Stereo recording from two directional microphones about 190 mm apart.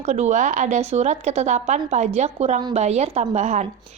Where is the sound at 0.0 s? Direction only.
40° right (ahead or behind).